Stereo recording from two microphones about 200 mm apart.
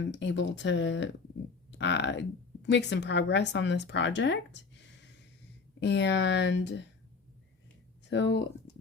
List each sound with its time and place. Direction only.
0.1 s speech: 65° left (ahead or behind)
8.1 s speech: 65° left (ahead or behind)